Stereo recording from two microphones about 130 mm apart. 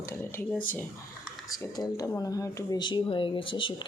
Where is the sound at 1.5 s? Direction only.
30° left (ahead or behind).